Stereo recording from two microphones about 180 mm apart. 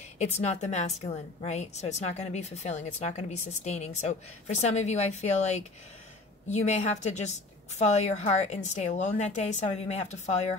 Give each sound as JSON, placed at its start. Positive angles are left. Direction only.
{"t": 0.2, "sound": "a woman's voice", "side_deg": 40}
{"t": 6.6, "sound": "a woman's voice", "side_deg": 40}